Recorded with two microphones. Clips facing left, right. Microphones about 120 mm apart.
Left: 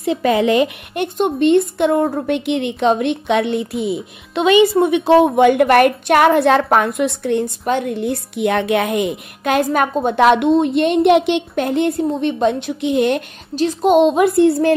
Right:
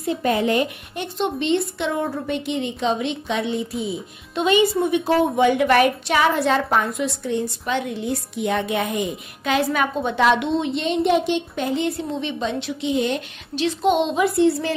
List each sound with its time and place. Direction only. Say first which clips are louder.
0.0 s a woman's voice: left 5 dB; 90° left
1.0 s a woman's voice: left 8 dB; 50° left (ahead or behind)
13.6 s a woman's voice: left 4 dB; 40° left (ahead or behind)
14.0 s a child's voice: left 6 dB; 55° left (ahead or behind)